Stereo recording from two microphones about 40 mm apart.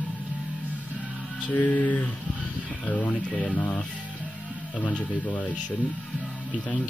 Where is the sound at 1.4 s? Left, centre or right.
Left.